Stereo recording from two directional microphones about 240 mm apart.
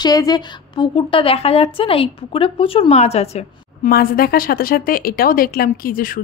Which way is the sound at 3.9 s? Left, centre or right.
Left.